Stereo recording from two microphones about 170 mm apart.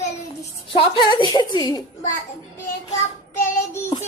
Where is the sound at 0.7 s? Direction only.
30° left (ahead or behind).